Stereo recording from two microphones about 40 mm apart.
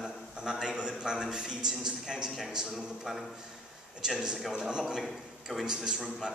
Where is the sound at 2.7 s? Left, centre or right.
Centre.